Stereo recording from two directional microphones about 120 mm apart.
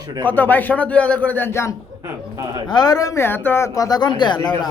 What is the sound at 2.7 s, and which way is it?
Speech, 35° left (ahead or behind).